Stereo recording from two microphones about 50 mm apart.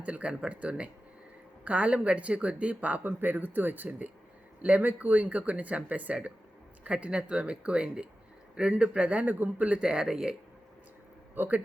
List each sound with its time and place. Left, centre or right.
0.0 s speech: right
3.0 s speech: right
9.8 s speech: centre
11.3 s speech: right